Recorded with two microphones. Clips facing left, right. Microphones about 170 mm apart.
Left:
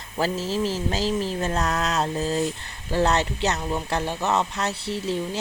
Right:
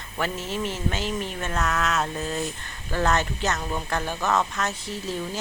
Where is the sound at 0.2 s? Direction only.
35° left (ahead or behind).